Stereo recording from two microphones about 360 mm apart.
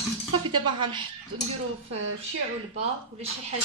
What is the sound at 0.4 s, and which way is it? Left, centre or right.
Speech, centre.